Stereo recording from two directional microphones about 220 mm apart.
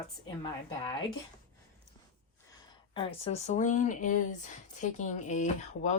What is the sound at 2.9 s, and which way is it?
Speech, 25° left (ahead or behind).